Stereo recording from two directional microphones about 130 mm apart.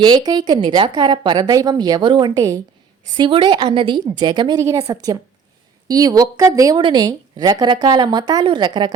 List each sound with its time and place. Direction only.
0.0 s a woman's voice: 35° right (ahead or behind)